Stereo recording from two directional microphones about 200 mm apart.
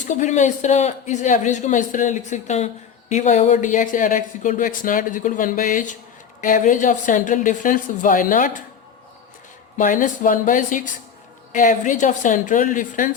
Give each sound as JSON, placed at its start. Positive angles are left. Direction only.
{"t": 0.1, "sound": "speech", "side_deg": 35}
{"t": 9.7, "sound": "speech", "side_deg": 40}